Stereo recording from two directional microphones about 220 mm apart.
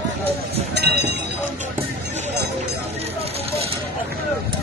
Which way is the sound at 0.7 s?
50° right (ahead or behind).